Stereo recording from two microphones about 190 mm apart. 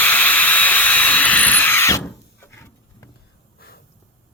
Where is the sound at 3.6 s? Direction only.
55° left (ahead or behind).